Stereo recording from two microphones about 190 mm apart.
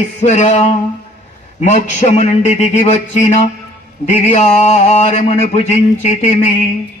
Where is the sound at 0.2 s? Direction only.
40° left (ahead or behind).